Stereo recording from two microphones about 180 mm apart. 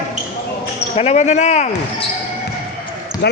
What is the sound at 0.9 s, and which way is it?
A man's voice, 35° left (ahead or behind).